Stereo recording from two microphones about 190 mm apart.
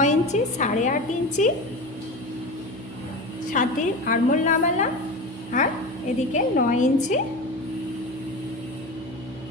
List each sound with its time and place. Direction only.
0.0 s a woman's voice: 40° left (ahead or behind)
3.5 s a woman's voice: 45° left (ahead or behind)
6.3 s a woman's voice: 40° left (ahead or behind)